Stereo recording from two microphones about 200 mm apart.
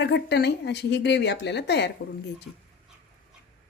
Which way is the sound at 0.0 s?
60° left (ahead or behind).